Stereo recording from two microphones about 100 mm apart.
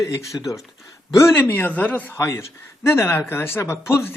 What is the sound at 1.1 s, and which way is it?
Speech, 25° left (ahead or behind).